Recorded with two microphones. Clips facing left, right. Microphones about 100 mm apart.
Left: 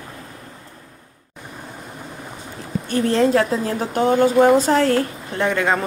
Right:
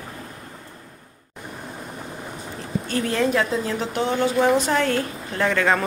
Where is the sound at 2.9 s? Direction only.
30° left (ahead or behind).